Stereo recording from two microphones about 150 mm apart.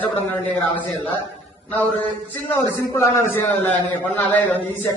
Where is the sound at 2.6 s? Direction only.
15° left (ahead or behind).